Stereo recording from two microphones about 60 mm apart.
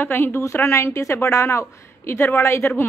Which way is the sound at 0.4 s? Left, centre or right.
Left.